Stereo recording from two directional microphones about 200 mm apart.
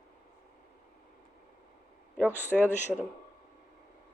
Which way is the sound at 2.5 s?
Centre (ahead or behind).